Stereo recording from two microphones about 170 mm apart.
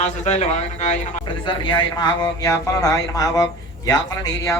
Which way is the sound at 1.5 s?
30° left (ahead or behind).